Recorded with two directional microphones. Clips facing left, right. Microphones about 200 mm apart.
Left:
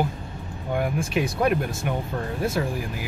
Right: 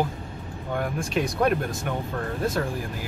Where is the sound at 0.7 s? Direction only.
5° left (ahead or behind).